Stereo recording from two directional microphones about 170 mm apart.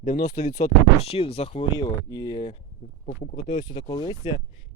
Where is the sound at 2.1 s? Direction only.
20° left (ahead or behind).